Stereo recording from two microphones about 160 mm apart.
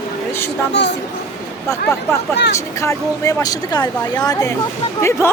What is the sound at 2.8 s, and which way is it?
Speech, 20° left (ahead or behind).